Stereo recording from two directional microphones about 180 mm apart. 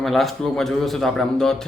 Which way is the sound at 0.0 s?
Centre (ahead or behind).